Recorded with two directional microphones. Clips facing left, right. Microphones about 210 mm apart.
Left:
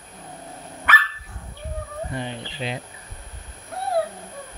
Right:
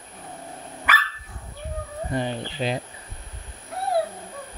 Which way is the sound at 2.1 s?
40° right (ahead or behind).